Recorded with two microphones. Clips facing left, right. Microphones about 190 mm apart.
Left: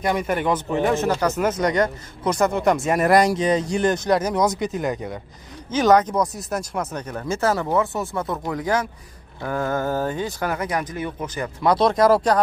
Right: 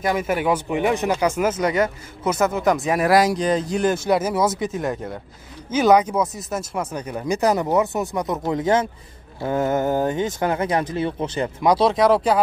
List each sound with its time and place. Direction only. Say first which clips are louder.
0.0 s speech: right 1 dB; 5° right (ahead or behind)
5.7 s speech: right 1 dB; 10° right (ahead or behind); by 11.5 s 25° right (ahead or behind)
11.6 s speech: even; 10° right (ahead or behind)